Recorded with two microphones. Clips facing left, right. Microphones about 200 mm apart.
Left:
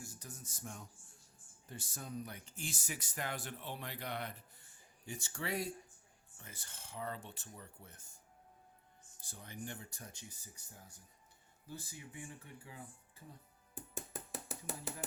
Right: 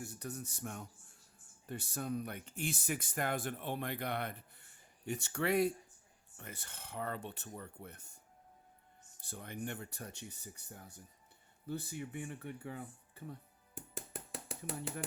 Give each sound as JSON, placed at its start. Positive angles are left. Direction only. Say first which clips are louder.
{"t": 0.0, "sound": "speech", "louder": "right 8 dB", "side_deg": -65}
{"t": 9.2, "sound": "speech", "louder": "right 5 dB", "side_deg": -60}